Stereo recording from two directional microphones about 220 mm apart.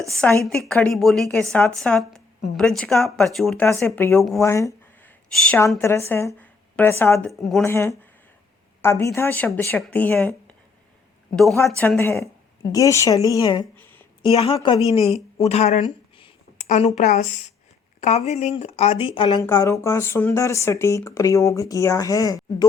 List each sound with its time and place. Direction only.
0.1 s a woman's voice: 5° left (ahead or behind)
7.6 s speech: 10° left (ahead or behind)
11.8 s speech: 10° left (ahead or behind)
13.7 s a sound: 10° left (ahead or behind)
14.2 s a woman's voice: 25° left (ahead or behind)
14.8 s a sound: 30° left (ahead or behind)
16.6 s a woman's voice: 30° left (ahead or behind); by 22.4 s 15° left (ahead or behind)